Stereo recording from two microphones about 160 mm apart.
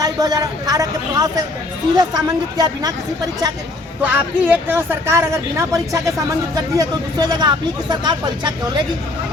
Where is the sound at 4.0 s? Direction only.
10° right (ahead or behind).